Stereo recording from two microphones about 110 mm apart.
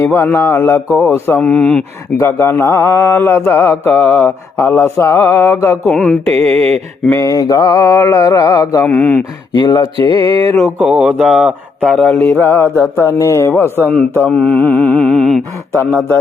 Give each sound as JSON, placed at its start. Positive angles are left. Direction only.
{"t": 0.0, "sound": "mantra", "side_deg": 20}
{"t": 2.1, "sound": "mantra", "side_deg": 25}
{"t": 5.9, "sound": "mantra", "side_deg": 10}
{"t": 7.1, "sound": "mantra", "side_deg": 30}
{"t": 8.9, "sound": "mantra", "side_deg": 10}
{"t": 9.5, "sound": "speech", "side_deg": 40}
{"t": 10.0, "sound": "mantra", "side_deg": -55}
{"t": 10.8, "sound": "speech", "side_deg": -5}
{"t": 12.4, "sound": "mantra", "side_deg": 20}